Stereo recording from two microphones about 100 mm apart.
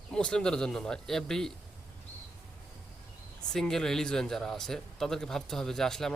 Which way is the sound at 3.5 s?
5° left (ahead or behind).